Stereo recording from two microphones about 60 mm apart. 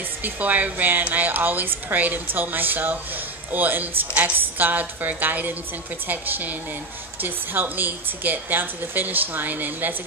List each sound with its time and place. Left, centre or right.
0.2 s a woman's voice: right